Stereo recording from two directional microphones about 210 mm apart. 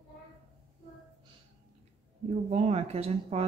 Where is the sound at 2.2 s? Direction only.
30° right (ahead or behind).